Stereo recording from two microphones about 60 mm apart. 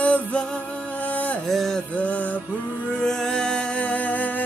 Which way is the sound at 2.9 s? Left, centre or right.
Centre.